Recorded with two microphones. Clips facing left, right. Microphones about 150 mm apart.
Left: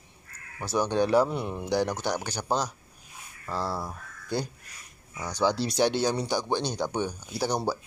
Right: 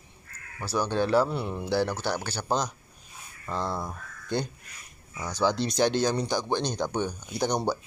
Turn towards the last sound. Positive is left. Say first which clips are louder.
# right 1 dB
turn(degrees=5)  # may be behind; listen again after turning